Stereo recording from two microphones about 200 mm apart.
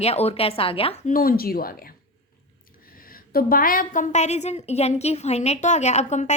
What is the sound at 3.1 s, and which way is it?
A woman's voice, 45° left (ahead or behind).